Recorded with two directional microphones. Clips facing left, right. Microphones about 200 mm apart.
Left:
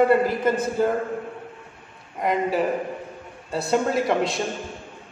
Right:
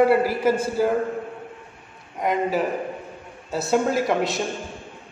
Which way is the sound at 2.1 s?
Centre (ahead or behind).